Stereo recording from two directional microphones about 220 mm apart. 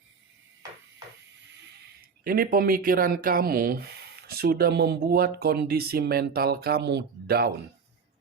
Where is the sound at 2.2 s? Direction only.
40° right (ahead or behind).